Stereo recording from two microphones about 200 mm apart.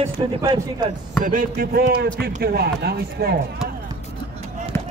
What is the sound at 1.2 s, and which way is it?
Speech, 40° right (ahead or behind).